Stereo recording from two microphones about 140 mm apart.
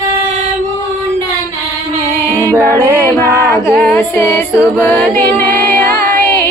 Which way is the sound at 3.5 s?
20° left (ahead or behind).